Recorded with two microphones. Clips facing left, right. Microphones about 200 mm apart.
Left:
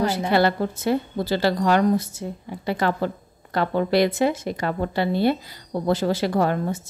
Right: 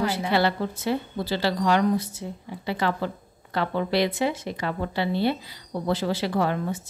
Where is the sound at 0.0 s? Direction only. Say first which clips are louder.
Left 3 dB; 45° left (ahead or behind).